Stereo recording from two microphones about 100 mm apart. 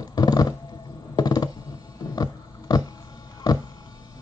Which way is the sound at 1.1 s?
40° left (ahead or behind).